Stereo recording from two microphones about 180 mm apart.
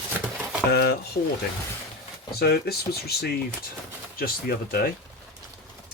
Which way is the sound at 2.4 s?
60° left (ahead or behind).